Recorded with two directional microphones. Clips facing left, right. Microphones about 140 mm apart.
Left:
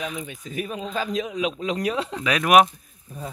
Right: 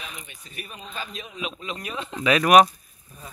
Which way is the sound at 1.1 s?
90° left.